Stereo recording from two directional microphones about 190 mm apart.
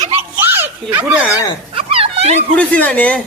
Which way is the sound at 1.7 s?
30° right (ahead or behind).